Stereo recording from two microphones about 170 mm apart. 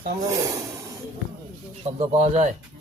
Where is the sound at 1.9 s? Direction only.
40° right (ahead or behind).